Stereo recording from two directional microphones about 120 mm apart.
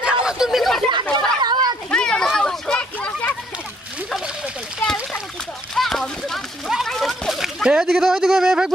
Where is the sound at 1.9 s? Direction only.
5° left (ahead or behind).